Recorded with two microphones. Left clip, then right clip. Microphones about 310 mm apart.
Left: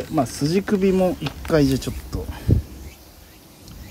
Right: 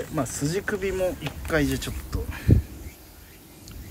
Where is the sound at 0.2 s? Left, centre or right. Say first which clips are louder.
Left 6 dB; centre.